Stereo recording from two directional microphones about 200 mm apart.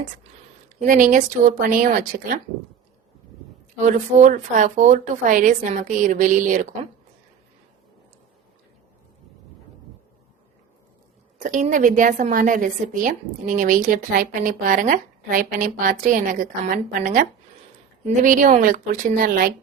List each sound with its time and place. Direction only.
0.8 s speech: 40° right (ahead or behind)
3.8 s a woman's voice: 40° right (ahead or behind)
11.3 s a woman's voice: 40° right (ahead or behind)